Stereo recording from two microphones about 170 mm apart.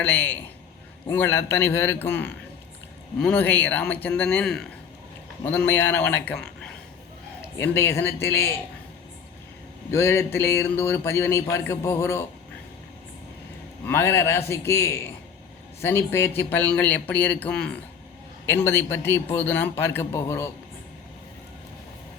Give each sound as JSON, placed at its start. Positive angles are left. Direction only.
{"t": 0.0, "sound": "a man's voice", "side_deg": 10}
{"t": 9.9, "sound": "a man's voice", "side_deg": 15}
{"t": 13.8, "sound": "a man's voice", "side_deg": 15}